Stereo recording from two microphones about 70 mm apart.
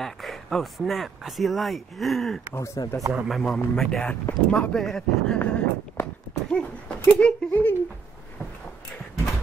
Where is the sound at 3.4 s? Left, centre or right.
Centre.